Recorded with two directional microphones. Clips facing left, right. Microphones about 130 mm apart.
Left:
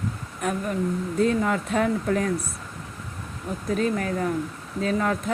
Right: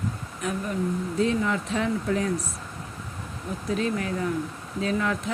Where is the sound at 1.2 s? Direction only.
50° left (ahead or behind).